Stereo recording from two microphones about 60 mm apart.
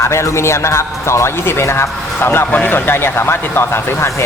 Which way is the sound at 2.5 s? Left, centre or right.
Left.